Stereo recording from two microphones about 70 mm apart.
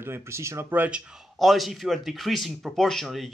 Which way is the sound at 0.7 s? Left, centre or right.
Centre.